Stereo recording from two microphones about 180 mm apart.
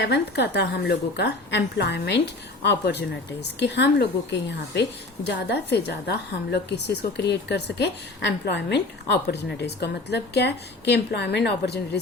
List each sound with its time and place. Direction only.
0.0 s a woman's voice: 70° left (ahead or behind)